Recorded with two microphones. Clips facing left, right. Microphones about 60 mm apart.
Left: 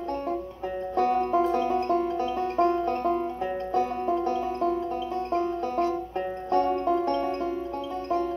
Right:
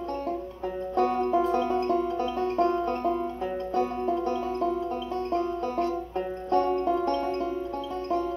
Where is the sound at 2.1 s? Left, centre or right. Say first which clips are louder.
Even; centre.